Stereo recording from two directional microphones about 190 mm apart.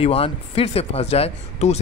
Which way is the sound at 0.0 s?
30° left (ahead or behind).